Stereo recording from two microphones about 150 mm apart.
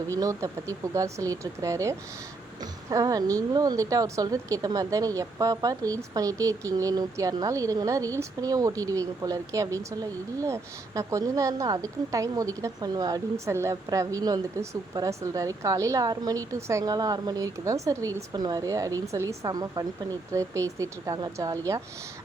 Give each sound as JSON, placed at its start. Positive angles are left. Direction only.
{"t": 0.2, "sound": "a woman's voice", "side_deg": -20}